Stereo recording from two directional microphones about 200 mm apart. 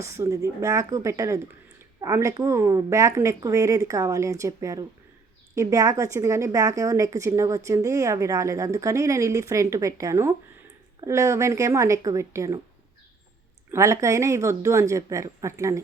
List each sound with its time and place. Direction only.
0.0 s a woman's voice: 15° right (ahead or behind)
13.7 s a woman's voice: 15° right (ahead or behind)